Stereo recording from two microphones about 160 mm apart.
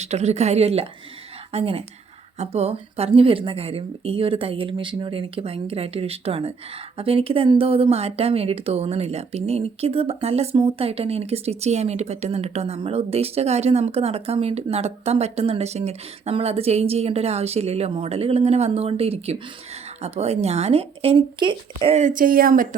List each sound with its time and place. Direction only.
0.0 s a woman's voice: 45° right (ahead or behind)
21.9 s speech: 55° right (ahead or behind)